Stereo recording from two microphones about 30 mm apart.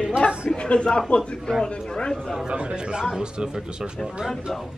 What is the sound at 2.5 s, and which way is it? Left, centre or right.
A man's voice, right.